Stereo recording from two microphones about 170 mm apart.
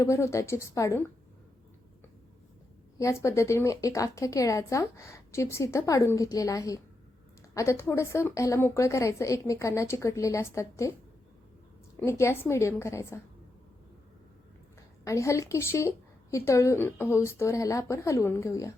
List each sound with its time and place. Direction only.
0.0 s a woman's voice: 15° left (ahead or behind)
3.0 s a woman's voice: 15° left (ahead or behind)
11.9 s a woman's voice: 15° left (ahead or behind)
15.0 s a woman's voice: 20° left (ahead or behind)